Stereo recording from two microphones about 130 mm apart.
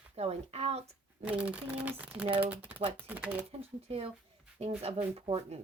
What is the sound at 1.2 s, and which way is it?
Speech, 10° right (ahead or behind).